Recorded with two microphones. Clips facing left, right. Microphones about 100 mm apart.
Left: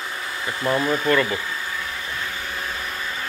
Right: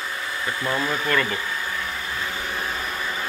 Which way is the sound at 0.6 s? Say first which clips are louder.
Left 5 dB; 15° left (ahead or behind).